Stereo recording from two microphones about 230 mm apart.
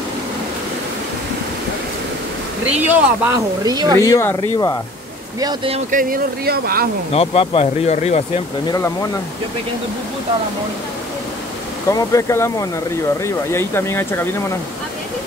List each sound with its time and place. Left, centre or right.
2.8 s speech: centre
4.0 s speech: centre
5.4 s speech: right
5.9 s speech: right
7.1 s speech: left
8.6 s speech: centre
11.9 s speech: centre